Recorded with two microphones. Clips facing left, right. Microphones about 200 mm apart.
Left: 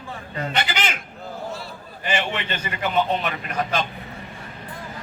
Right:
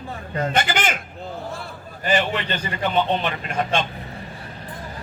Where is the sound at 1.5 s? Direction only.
55° right (ahead or behind).